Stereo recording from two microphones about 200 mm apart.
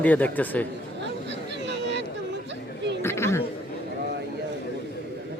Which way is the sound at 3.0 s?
15° left (ahead or behind).